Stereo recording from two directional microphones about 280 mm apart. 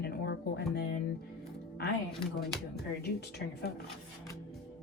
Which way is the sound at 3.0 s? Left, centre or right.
Left.